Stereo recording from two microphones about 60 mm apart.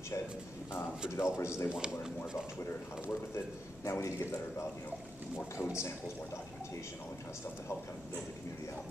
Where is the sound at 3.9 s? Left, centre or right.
Left.